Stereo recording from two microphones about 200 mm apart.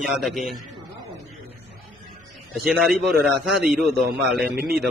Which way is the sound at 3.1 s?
Centre (ahead or behind).